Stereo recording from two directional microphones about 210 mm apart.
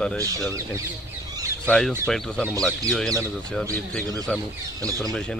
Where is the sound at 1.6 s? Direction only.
5° left (ahead or behind).